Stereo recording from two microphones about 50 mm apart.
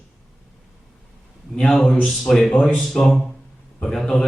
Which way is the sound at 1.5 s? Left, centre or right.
Centre.